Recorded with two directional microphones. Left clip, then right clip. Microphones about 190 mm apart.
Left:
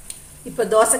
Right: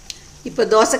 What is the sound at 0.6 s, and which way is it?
Speech, 35° right (ahead or behind).